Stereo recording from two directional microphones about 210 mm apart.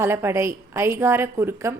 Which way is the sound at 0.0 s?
10° right (ahead or behind).